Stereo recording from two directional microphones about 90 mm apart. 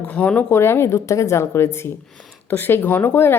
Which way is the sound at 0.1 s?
20° left (ahead or behind).